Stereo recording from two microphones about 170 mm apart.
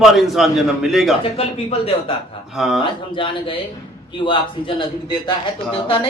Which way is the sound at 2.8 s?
30° left (ahead or behind).